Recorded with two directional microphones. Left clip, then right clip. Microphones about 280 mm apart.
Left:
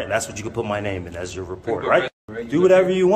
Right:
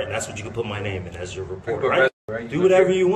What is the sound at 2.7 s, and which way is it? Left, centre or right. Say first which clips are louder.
Speech: even; centre.